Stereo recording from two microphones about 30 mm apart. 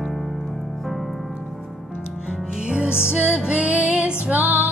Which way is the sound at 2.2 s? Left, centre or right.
Centre.